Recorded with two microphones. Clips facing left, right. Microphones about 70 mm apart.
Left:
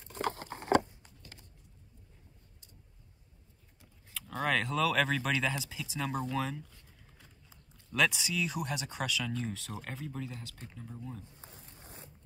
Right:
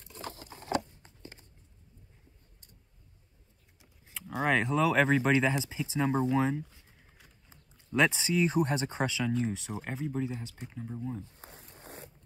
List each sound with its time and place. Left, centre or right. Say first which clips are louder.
0.1 s patter: left 8 dB; left
1.0 s a sound: right 5 dB; right
3.8 s speech: right 1 dB; centre
7.9 s speech: right 4 dB; right
9.3 s speech: right 6 dB; centre
11.4 s zipper: right 4 dB; right